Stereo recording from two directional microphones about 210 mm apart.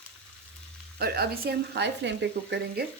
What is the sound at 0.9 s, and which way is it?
Speech, 50° right (ahead or behind).